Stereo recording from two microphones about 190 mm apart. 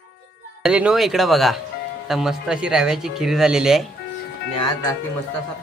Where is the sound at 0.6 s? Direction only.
5° right (ahead or behind).